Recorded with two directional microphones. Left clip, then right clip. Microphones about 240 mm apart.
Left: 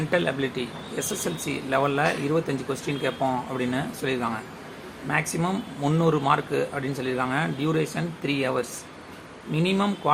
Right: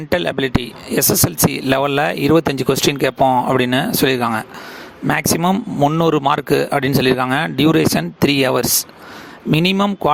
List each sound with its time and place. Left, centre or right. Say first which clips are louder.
0.1 s speech: right 8 dB; right